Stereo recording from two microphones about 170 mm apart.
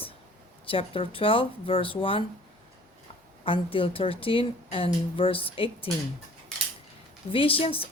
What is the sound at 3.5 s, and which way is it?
Speech, 30° left (ahead or behind).